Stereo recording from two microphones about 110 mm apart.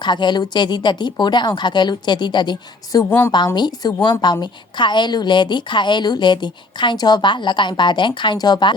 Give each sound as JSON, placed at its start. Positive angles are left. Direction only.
{"t": 0.0, "sound": "speech", "side_deg": 45}
{"t": 3.1, "sound": "a woman's voice", "side_deg": 20}
{"t": 3.3, "sound": "a woman's voice", "side_deg": 40}